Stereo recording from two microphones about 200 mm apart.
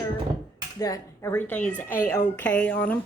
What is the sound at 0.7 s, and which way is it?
Speech, 15° left (ahead or behind).